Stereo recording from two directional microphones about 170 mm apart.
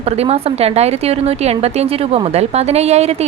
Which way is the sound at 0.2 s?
35° right (ahead or behind).